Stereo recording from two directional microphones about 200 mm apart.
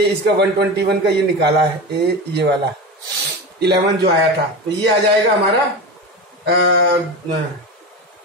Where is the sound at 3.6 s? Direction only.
55° right (ahead or behind).